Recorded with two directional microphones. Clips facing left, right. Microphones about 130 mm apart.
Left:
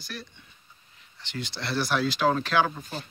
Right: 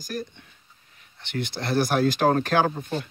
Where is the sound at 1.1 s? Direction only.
55° right (ahead or behind).